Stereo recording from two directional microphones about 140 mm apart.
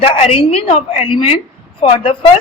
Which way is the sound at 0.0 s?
45° left (ahead or behind).